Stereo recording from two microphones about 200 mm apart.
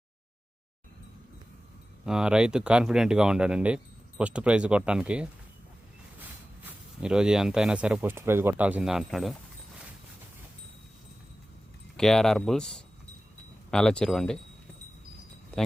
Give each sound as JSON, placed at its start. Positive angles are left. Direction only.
{"t": 2.0, "sound": "speech", "side_deg": -5}
{"t": 6.7, "sound": "speech", "side_deg": -5}
{"t": 11.9, "sound": "speech", "side_deg": 0}